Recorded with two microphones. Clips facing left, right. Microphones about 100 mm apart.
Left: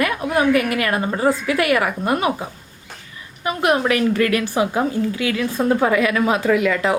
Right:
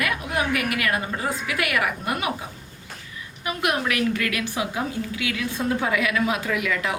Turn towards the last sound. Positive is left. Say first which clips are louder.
# left 8 dB
turn(degrees=35)  # may be behind; listen again after turning